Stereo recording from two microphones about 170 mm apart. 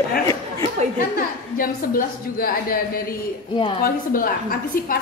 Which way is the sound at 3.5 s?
30° left (ahead or behind).